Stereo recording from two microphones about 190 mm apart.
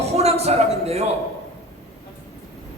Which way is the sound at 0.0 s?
35° right (ahead or behind).